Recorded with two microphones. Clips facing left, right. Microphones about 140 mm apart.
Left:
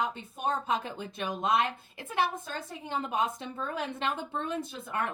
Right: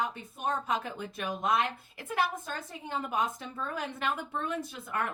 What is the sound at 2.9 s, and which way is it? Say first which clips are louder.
A woman's voice: left 1 dB; 25° left (ahead or behind).